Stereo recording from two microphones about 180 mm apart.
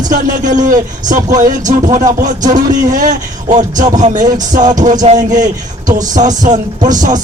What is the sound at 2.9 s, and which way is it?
Speech, 45° right (ahead or behind).